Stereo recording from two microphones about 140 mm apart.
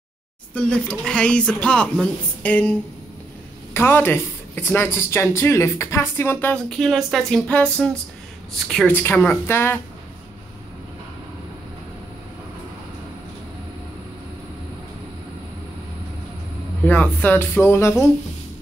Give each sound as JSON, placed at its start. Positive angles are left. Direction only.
{"t": 0.6, "sound": "speech", "side_deg": 5}
{"t": 3.7, "sound": "speech", "side_deg": 15}
{"t": 6.8, "sound": "speech", "side_deg": 0}
{"t": 8.6, "sound": "speech", "side_deg": 5}
{"t": 8.9, "sound": "speech", "side_deg": 15}
{"t": 16.8, "sound": "speech", "side_deg": 10}